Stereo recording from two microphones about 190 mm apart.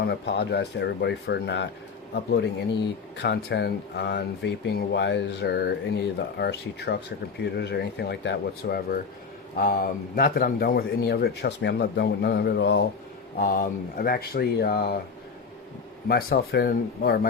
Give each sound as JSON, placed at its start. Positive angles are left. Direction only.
{"t": 0.0, "sound": "speech", "side_deg": 60}
{"t": 13.4, "sound": "speech", "side_deg": 50}
{"t": 16.0, "sound": "speech", "side_deg": 55}